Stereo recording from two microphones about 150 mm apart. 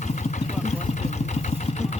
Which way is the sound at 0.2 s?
55° left (ahead or behind).